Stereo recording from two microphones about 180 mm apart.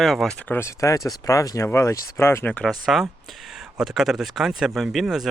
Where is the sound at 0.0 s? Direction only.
Centre (ahead or behind).